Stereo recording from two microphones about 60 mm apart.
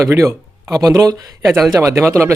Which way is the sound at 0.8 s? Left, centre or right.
Right.